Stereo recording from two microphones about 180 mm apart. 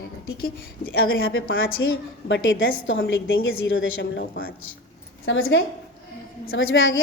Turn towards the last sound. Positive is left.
turn(degrees=90)